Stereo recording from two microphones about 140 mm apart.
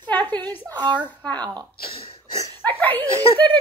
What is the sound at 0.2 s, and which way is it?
A woman's voice, 35° right (ahead or behind).